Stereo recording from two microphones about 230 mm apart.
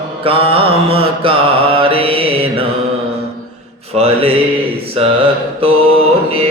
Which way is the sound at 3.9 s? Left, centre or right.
Right.